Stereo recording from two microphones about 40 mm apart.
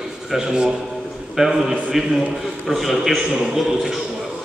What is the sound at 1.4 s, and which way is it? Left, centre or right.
A man's voice, centre.